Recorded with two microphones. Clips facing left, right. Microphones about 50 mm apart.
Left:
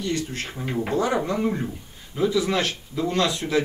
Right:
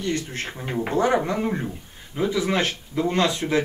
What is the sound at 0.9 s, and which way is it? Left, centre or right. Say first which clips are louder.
Speech: right 3 dB; right.